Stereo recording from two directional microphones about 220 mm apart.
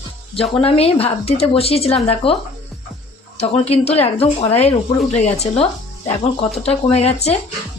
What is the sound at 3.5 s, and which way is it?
A woman's voice, 25° left (ahead or behind).